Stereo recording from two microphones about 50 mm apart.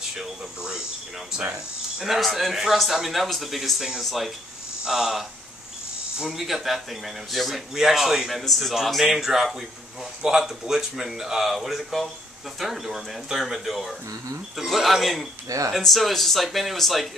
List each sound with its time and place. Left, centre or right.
0.2 s speech: centre
2.0 s a man's voice: centre